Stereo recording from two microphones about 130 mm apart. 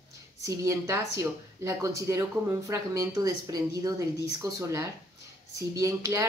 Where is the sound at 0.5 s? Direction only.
25° right (ahead or behind).